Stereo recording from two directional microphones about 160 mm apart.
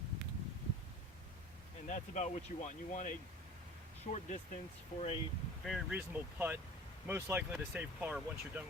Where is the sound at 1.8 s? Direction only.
45° left (ahead or behind).